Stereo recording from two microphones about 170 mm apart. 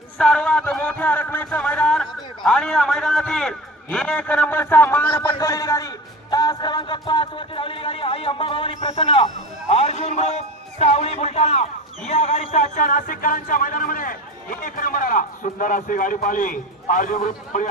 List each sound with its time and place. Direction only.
0.2 s a man's voice: 5° left (ahead or behind); by 17.7 s 45° left (ahead or behind)